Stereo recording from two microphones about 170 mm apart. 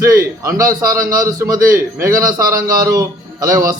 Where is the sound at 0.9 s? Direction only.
55° right (ahead or behind).